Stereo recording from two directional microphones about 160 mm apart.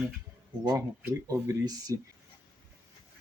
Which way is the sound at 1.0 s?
15° right (ahead or behind).